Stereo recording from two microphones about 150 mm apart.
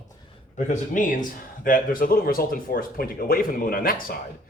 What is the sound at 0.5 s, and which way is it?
A man's voice, 60° left (ahead or behind).